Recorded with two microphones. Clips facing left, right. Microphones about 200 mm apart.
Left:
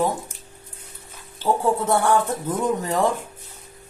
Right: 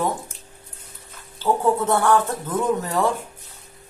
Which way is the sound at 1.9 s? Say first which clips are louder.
Even; 15° left (ahead or behind).